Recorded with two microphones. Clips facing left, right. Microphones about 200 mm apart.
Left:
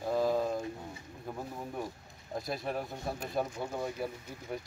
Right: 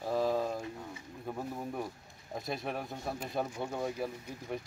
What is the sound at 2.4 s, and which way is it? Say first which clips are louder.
Speech: left 1 dB; centre (ahead or behind).